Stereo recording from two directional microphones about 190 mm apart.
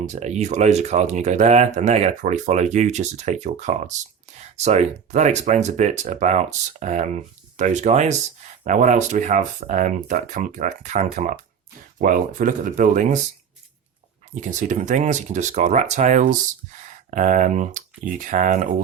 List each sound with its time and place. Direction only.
0.0 s speech: 35° right (ahead or behind)
14.4 s speech: 40° right (ahead or behind)